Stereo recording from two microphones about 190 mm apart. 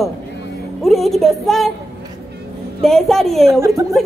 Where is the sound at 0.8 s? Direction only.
Centre (ahead or behind).